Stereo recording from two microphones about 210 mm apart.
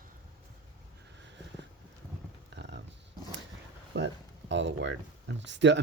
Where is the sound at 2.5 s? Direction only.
60° right (ahead or behind).